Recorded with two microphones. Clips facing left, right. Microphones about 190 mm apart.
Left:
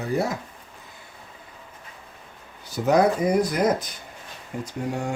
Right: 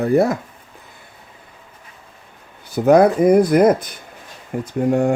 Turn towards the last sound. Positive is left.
turn(degrees=-55)  # may be behind; listen again after turning